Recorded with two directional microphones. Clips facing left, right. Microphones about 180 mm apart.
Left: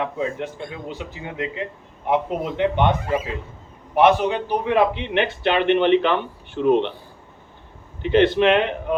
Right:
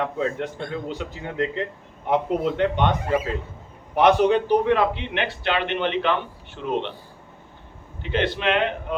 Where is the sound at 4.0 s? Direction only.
10° left (ahead or behind).